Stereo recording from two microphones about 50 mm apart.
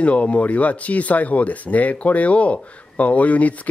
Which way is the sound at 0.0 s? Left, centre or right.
Left.